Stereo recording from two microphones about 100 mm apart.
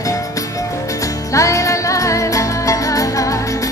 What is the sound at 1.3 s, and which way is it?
Music, 30° left (ahead or behind).